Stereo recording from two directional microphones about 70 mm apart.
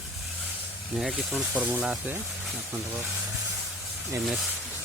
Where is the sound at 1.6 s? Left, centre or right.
Centre.